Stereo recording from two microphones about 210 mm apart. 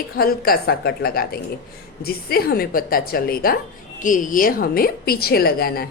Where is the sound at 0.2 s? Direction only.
45° left (ahead or behind).